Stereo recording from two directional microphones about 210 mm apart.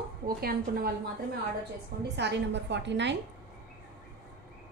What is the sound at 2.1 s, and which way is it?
A woman's voice, 55° right (ahead or behind).